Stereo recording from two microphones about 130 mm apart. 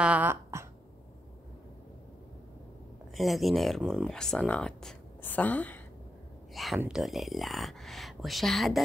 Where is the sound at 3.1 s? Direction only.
Centre (ahead or behind).